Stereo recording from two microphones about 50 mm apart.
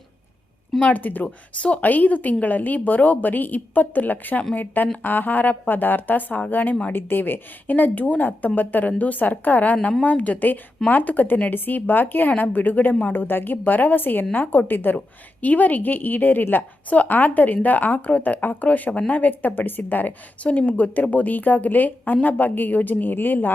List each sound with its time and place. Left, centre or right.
0.8 s a woman's voice: left
14.9 s speech: left